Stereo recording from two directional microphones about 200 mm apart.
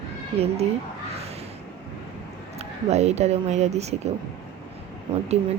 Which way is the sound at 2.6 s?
35° right (ahead or behind).